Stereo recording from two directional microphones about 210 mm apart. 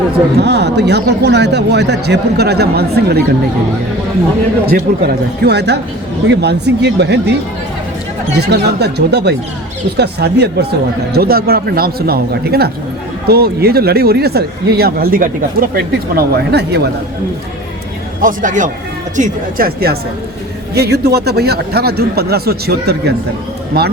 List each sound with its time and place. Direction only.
0.3 s speech: 50° right (ahead or behind)
4.6 s speech: 45° right (ahead or behind)
8.4 s speech: 50° right (ahead or behind)
18.2 s speech: 40° right (ahead or behind)